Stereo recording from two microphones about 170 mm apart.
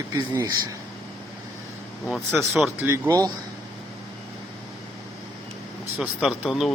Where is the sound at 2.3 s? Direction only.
10° right (ahead or behind).